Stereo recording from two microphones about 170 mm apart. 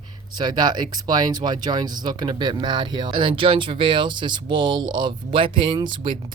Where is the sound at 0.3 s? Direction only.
25° right (ahead or behind).